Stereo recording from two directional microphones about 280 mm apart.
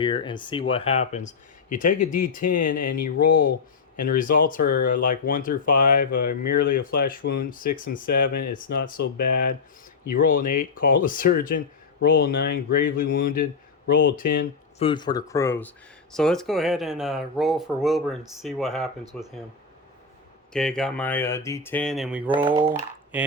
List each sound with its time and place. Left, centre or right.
0.0 s speech: centre
14.8 s speech: centre
20.5 s speech: centre
22.4 s speech: centre